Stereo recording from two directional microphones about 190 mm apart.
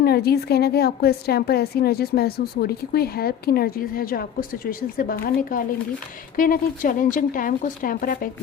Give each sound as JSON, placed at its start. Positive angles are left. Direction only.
{"t": 0.0, "sound": "a woman's voice", "side_deg": 55}